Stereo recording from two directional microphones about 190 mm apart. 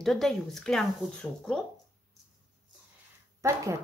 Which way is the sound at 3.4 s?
15° right (ahead or behind).